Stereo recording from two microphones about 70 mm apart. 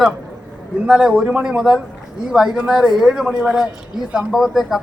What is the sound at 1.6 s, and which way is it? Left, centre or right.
A man's voice, centre.